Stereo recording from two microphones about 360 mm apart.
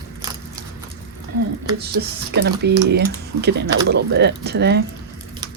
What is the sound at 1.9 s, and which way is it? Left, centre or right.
Speech, right.